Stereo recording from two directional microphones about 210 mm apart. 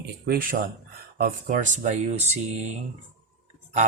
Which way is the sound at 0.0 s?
45° right (ahead or behind).